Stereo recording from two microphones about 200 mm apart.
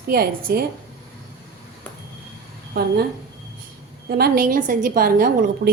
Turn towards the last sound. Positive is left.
turn(degrees=-45)  # may be behind; listen again after turning